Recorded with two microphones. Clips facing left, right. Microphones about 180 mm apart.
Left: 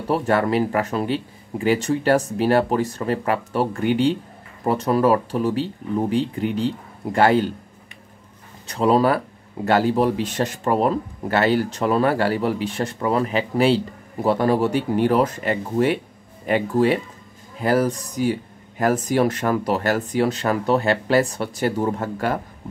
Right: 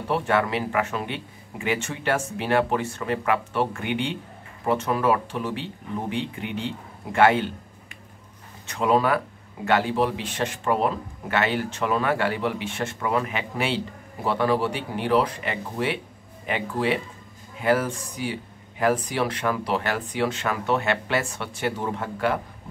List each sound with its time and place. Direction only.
0.1 s speech: 40° left (ahead or behind)
8.6 s speech: 35° left (ahead or behind)